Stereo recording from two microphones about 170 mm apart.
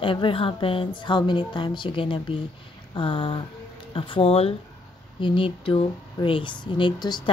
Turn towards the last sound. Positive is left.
turn(degrees=25)  # may be behind; listen again after turning